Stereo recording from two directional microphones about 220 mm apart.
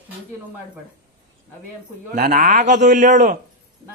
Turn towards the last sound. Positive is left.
turn(degrees=-35)  # may be behind; listen again after turning